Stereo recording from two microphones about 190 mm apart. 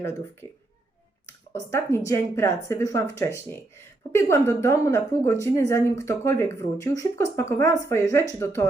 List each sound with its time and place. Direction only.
0.0 s a woman's voice: 15° left (ahead or behind)